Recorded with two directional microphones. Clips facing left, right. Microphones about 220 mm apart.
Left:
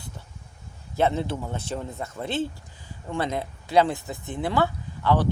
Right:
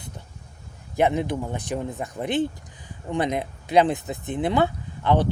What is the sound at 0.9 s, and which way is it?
Speech, 15° right (ahead or behind).